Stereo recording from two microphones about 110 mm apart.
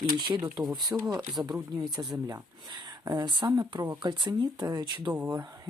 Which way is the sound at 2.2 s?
35° right (ahead or behind).